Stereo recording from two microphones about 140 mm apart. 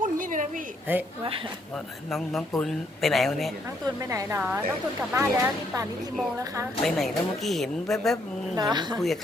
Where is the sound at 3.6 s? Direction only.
25° right (ahead or behind).